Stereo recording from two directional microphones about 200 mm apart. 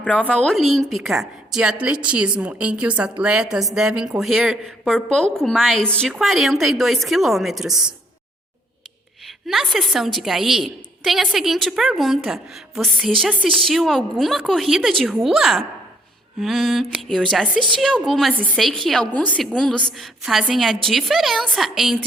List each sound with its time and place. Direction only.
0.0 s a woman's voice: 5° left (ahead or behind)
9.5 s a woman's voice: centre (ahead or behind)